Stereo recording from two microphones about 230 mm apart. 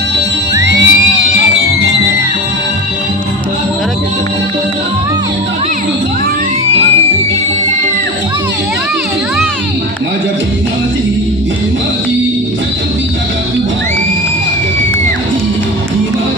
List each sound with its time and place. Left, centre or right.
0.7 s music: right